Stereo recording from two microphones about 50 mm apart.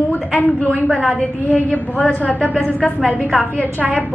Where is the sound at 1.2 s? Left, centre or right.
Left.